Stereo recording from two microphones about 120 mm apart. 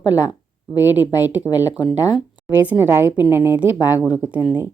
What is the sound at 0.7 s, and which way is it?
Speech, 15° right (ahead or behind).